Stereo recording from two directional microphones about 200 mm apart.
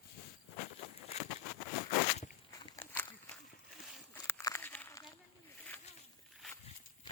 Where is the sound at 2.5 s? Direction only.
15° left (ahead or behind).